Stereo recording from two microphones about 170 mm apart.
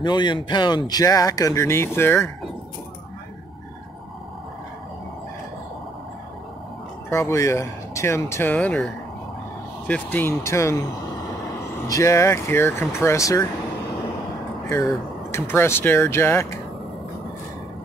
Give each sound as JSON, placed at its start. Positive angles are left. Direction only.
{"t": 0.0, "sound": "speech", "side_deg": 25}
{"t": 7.1, "sound": "speech", "side_deg": 15}
{"t": 11.9, "sound": "speech", "side_deg": 15}
{"t": 15.3, "sound": "speech", "side_deg": 15}